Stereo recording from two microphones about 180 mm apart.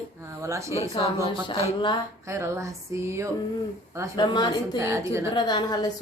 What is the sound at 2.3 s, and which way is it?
Speech, 15° right (ahead or behind).